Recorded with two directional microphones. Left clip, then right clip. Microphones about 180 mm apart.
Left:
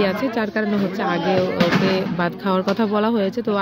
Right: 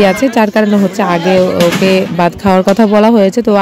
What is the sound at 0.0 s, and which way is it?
Speech, 50° right (ahead or behind).